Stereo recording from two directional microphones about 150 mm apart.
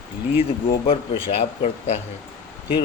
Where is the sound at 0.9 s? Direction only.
45° left (ahead or behind).